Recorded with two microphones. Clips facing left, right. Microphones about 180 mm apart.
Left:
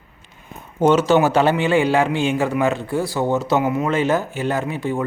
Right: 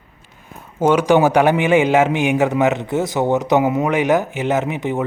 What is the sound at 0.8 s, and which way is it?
A man's voice, 10° right (ahead or behind).